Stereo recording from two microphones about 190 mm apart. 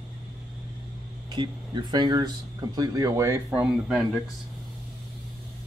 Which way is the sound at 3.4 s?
Centre (ahead or behind).